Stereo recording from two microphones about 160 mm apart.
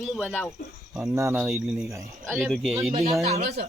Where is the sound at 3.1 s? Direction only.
45° right (ahead or behind).